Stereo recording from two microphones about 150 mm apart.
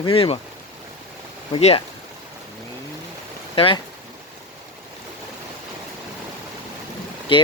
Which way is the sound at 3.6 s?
35° left (ahead or behind).